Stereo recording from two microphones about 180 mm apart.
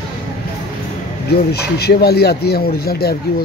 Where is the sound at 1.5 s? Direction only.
65° left (ahead or behind).